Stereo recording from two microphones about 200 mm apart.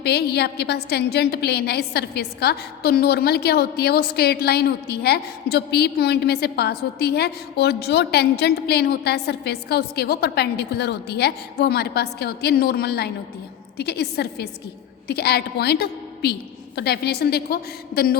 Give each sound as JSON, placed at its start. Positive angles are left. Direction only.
{"t": 0.0, "sound": "a woman's voice", "side_deg": 55}